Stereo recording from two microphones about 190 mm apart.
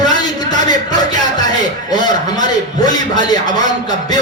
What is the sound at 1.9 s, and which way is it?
Speech, 20° left (ahead or behind).